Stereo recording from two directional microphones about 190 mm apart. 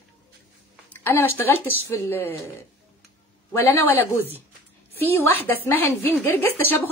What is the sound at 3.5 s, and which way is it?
A woman's voice, 10° left (ahead or behind).